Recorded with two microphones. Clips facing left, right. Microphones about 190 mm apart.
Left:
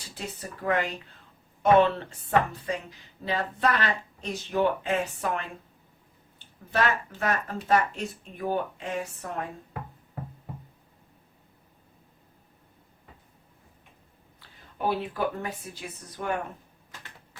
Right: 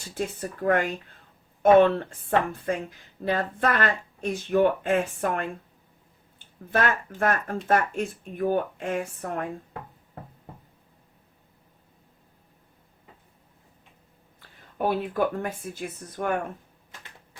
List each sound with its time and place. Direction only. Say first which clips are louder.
0.1 s speech: right 7 dB; 50° right (ahead or behind)
6.7 s speech: right 1 dB; 50° right (ahead or behind)
14.3 s speech: right 7 dB; 50° right (ahead or behind)